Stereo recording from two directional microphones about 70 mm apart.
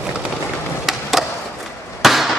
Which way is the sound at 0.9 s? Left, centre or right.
Centre.